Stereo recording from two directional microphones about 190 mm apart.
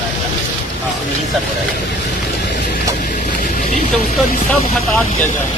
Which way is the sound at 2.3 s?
50° left (ahead or behind).